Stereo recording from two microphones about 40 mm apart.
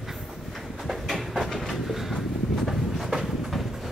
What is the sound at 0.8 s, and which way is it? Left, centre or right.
Train, centre.